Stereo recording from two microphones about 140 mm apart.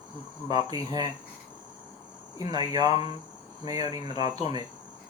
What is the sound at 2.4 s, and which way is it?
Speech, 30° right (ahead or behind).